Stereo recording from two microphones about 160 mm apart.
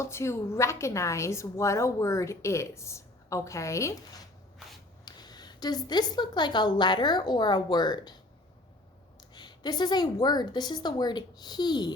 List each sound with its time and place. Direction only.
0.0 s a woman's voice: 15° left (ahead or behind)
5.0 s a woman's voice: 25° left (ahead or behind)
9.3 s a woman's voice: 25° left (ahead or behind)